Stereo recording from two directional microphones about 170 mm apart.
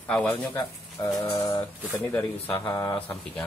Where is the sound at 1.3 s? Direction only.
20° left (ahead or behind).